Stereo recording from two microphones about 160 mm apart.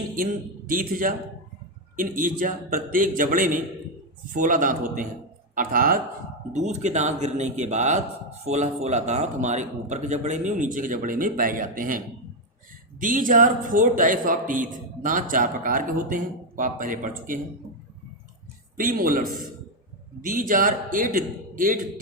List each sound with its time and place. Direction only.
0.7 s a man's voice: 60° right (ahead or behind)
6.8 s a man's voice: 45° right (ahead or behind)
18.8 s a man's voice: 60° right (ahead or behind)